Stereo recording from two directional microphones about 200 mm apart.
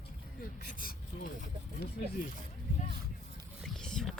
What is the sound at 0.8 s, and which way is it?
Speech, 45° left (ahead or behind).